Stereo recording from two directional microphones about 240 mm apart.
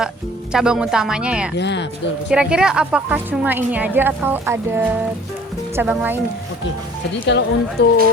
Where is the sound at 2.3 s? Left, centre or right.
Centre.